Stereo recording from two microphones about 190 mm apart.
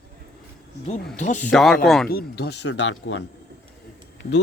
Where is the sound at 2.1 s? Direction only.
55° left (ahead or behind); by 3.2 s 75° left (ahead or behind).